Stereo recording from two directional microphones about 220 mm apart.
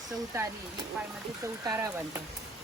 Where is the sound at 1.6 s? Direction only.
15° right (ahead or behind).